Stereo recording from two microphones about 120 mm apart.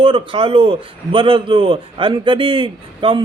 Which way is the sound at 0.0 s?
45° right (ahead or behind).